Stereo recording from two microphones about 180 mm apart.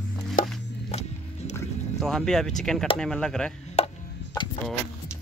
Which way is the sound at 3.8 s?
35° left (ahead or behind).